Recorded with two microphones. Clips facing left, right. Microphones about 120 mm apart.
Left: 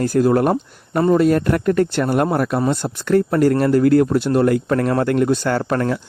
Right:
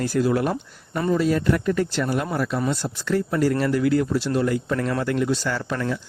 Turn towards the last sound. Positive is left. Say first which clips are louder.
# left 7 dB
turn(degrees=55)  # may be behind; listen again after turning